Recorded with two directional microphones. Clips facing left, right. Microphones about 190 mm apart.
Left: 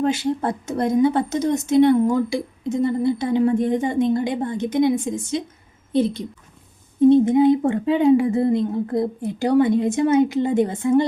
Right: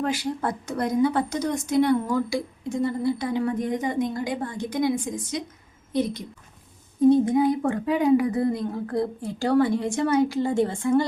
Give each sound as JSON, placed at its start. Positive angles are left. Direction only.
{"t": 0.0, "sound": "a woman's voice", "side_deg": 25}